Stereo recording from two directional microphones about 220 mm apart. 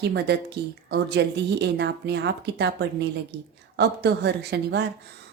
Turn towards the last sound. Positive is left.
turn(degrees=-50)  # may be behind; listen again after turning